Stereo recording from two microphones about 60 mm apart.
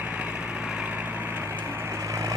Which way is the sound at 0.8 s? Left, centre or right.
Right.